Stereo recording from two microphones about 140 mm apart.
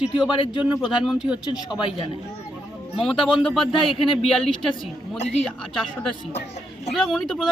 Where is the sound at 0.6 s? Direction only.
5° right (ahead or behind).